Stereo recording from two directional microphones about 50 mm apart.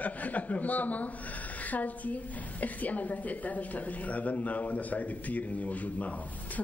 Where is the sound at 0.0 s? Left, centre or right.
Left.